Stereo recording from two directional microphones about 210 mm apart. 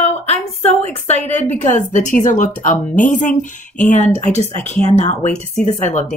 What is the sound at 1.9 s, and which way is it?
Speech, 35° left (ahead or behind).